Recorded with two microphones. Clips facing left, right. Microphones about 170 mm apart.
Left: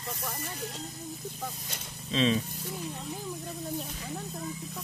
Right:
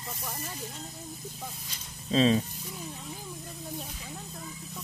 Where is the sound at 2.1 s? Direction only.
40° right (ahead or behind).